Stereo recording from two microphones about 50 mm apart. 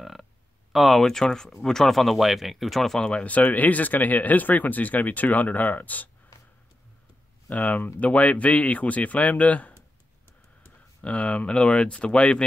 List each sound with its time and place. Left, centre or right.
0.0 s a sound: centre
0.7 s speech: centre
1.0 s speech: centre
3.1 s speech: left
6.3 s a sound: left
7.4 s speech: left
11.0 s speech: left